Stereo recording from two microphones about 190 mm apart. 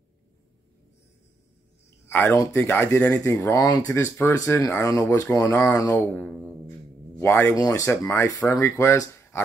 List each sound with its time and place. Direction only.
2.0 s speech: 15° left (ahead or behind)
7.2 s speech: 10° left (ahead or behind)